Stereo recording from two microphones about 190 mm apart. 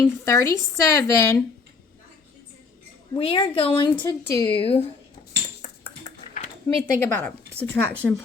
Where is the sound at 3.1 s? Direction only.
25° left (ahead or behind).